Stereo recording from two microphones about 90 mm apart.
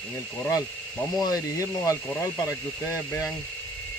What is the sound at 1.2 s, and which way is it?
Speech, 35° left (ahead or behind).